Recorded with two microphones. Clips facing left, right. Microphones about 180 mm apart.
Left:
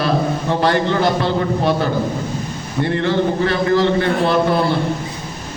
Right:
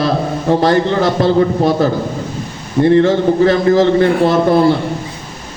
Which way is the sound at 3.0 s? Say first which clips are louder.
Right 6 dB; 45° right (ahead or behind).